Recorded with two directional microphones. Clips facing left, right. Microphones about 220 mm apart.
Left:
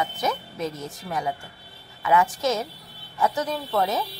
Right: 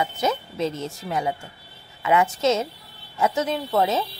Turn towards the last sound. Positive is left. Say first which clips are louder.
# right 3 dB
turn(degrees=-25)  # may be behind; listen again after turning